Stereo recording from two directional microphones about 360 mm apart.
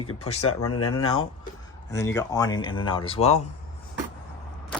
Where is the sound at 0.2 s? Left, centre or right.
Centre.